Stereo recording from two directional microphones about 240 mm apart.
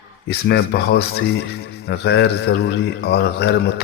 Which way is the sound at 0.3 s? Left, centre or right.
Left.